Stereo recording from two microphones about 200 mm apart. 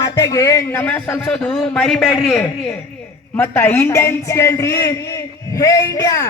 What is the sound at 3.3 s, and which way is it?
A man's voice, 10° left (ahead or behind).